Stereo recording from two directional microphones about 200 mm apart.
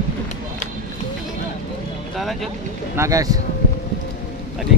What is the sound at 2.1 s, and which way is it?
Speech, centre (ahead or behind).